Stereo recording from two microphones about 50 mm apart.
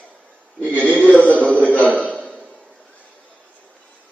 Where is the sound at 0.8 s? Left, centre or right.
Left.